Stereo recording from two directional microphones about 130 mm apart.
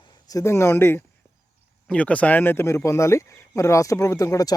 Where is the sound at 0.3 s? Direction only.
25° left (ahead or behind).